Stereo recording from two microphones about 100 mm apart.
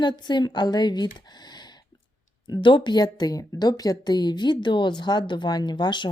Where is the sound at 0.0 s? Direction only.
50° left (ahead or behind).